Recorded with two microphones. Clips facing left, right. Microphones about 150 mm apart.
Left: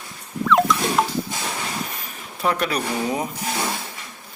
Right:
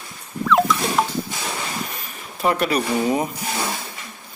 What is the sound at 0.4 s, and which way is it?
Rodents, centre (ahead or behind).